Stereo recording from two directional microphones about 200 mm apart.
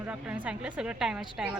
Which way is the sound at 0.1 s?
5° right (ahead or behind).